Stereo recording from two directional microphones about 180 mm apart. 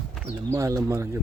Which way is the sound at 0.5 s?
15° right (ahead or behind).